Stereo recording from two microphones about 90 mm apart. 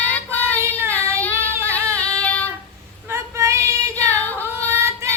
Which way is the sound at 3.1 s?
35° right (ahead or behind).